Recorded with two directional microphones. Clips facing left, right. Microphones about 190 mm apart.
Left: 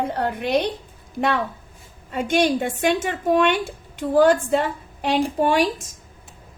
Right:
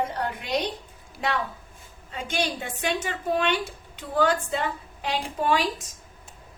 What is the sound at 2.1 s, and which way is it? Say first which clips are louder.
A woman's voice: left 9 dB; 50° left (ahead or behind).